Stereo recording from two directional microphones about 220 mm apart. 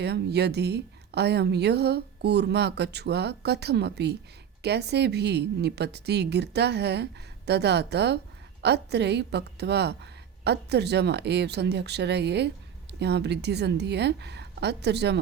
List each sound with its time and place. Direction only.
0.0 s a woman's voice: 50° right (ahead or behind)